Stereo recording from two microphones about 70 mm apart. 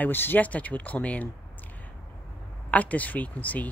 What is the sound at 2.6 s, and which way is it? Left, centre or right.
Speech, left.